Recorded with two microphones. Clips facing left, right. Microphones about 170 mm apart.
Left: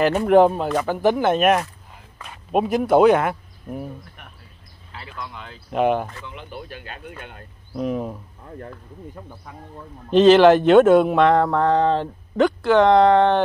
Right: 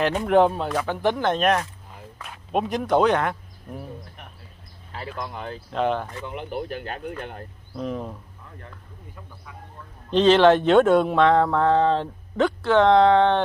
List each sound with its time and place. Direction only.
0.0 s speech: 5° left (ahead or behind)
4.9 s speech: 45° right (ahead or behind)
5.7 s speech: 10° left (ahead or behind)
6.2 s speech: 50° right (ahead or behind)
7.7 s speech: 10° left (ahead or behind)
9.1 s speech: 45° left (ahead or behind)
10.1 s speech: 5° left (ahead or behind)